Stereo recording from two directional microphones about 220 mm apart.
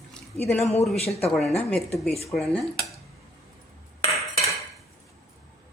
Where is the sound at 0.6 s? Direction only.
30° left (ahead or behind).